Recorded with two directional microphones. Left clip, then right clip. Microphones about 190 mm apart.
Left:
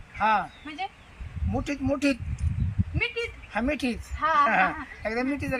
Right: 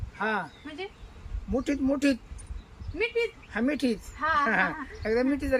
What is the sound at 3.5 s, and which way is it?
Speech, 10° right (ahead or behind).